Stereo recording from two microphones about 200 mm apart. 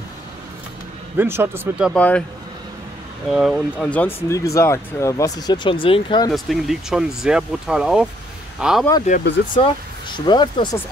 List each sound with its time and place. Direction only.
1.1 s speech: 10° right (ahead or behind)
2.0 s speech: 5° left (ahead or behind)
3.3 s speech: centre (ahead or behind); by 6.3 s 25° left (ahead or behind)
6.3 s speech: centre (ahead or behind)
9.1 s speech: 35° left (ahead or behind)
9.6 s speech: 25° left (ahead or behind)